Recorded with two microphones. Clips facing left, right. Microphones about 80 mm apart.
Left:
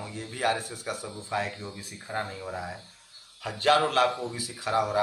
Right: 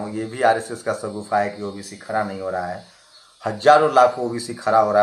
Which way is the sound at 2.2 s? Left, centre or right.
Right.